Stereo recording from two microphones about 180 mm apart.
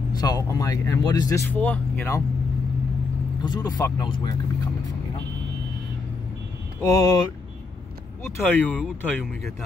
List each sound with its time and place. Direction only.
0.2 s speech: 20° left (ahead or behind)
3.4 s speech: 25° left (ahead or behind)
6.8 s speech: 20° left (ahead or behind)
8.5 s speech: 10° left (ahead or behind)